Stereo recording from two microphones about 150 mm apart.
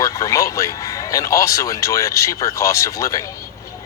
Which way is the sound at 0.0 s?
20° left (ahead or behind).